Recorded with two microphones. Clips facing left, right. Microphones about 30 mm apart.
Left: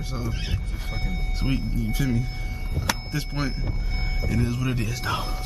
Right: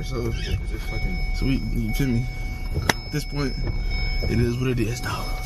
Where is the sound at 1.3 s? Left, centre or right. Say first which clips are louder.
Right 2 dB; centre.